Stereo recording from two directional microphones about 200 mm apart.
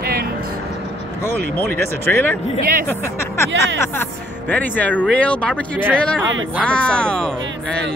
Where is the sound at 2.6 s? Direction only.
45° right (ahead or behind).